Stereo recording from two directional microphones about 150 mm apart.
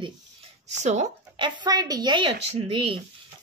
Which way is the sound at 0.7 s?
50° right (ahead or behind).